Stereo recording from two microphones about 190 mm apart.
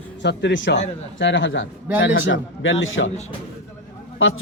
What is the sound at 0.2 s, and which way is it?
A man's voice, 65° left (ahead or behind).